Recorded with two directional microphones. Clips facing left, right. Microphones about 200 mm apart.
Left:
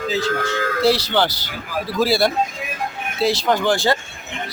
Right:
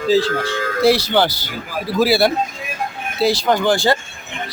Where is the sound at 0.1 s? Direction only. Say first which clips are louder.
Right 7 dB; 30° right (ahead or behind).